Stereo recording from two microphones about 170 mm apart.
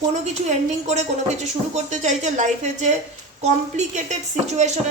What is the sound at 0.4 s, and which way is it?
A woman's voice, 40° right (ahead or behind).